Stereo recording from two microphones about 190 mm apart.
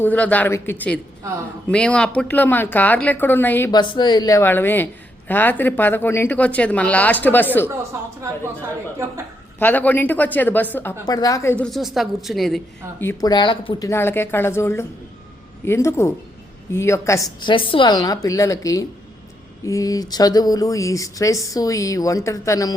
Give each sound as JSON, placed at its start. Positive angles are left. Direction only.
{"t": 0.0, "sound": "speech", "side_deg": 10}
{"t": 3.7, "sound": "speech", "side_deg": 25}
{"t": 9.6, "sound": "a woman's voice", "side_deg": 10}
{"t": 11.6, "sound": "a woman's voice", "side_deg": 0}
{"t": 13.0, "sound": "speech", "side_deg": 15}